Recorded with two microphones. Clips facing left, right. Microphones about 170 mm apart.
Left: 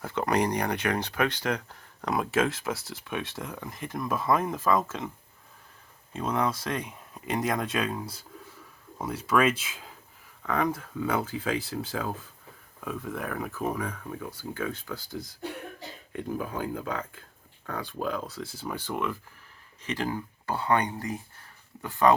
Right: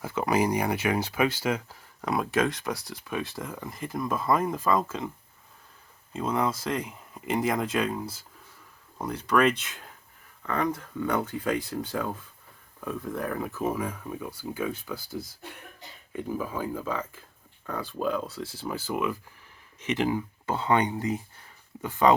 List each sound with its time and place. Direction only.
0.0 s speech: 5° right (ahead or behind)
6.1 s speech: 5° right (ahead or behind)
19.8 s speech: 20° right (ahead or behind)